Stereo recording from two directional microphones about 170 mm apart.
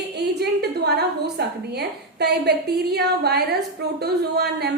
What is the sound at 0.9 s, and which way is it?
A woman's voice, 75° right (ahead or behind).